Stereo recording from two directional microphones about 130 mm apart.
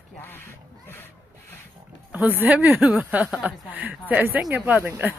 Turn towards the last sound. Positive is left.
turn(degrees=-15)  # may be behind; listen again after turning